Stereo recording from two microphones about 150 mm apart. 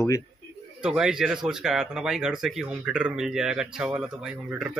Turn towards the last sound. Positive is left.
turn(degrees=-5)  # may be behind; listen again after turning